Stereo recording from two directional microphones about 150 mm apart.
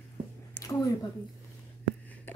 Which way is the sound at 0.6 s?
25° left (ahead or behind).